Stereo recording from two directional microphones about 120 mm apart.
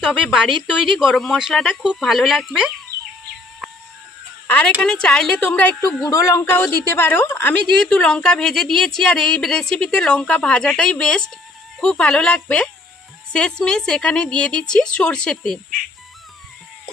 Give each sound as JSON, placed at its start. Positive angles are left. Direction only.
{"t": 0.0, "sound": "speech", "side_deg": -5}
{"t": 4.5, "sound": "a woman's voice", "side_deg": 10}
{"t": 5.9, "sound": "a woman's voice", "side_deg": 25}
{"t": 7.8, "sound": "a woman's voice", "side_deg": 5}